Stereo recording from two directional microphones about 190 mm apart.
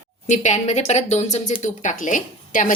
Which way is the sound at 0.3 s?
40° left (ahead or behind).